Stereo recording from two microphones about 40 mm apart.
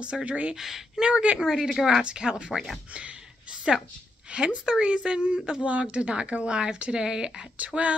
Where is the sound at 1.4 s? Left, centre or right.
Centre.